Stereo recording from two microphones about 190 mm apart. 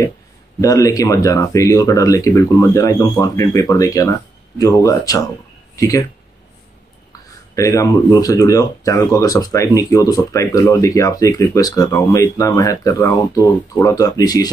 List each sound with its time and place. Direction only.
0.6 s speech: 20° left (ahead or behind)
7.1 s speech: 15° left (ahead or behind)